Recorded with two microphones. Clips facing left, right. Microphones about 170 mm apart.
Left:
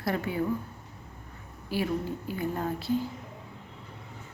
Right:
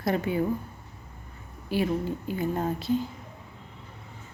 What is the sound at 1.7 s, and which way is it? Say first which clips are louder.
Speech: right 3 dB; 20° right (ahead or behind).